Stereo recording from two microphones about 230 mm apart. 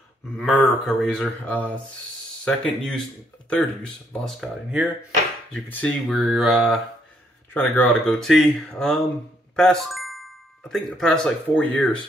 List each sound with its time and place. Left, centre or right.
0.4 s speech: centre